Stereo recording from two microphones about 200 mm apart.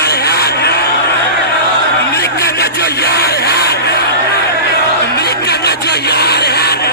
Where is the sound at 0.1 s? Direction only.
50° left (ahead or behind).